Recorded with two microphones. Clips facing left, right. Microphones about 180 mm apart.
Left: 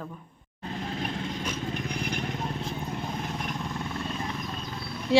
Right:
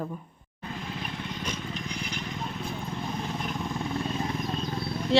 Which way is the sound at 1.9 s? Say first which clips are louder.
Left 4 dB; 55° left (ahead or behind).